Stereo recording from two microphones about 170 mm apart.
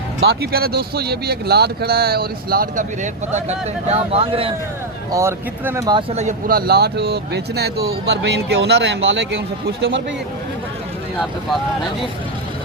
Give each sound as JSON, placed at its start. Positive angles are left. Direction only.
{"t": 0.2, "sound": "speech", "side_deg": -70}
{"t": 3.8, "sound": "speech", "side_deg": -35}
{"t": 5.1, "sound": "speech", "side_deg": -15}
{"t": 6.0, "sound": "speech", "side_deg": -35}
{"t": 6.5, "sound": "speech", "side_deg": -65}
{"t": 8.2, "sound": "a man's voice", "side_deg": -85}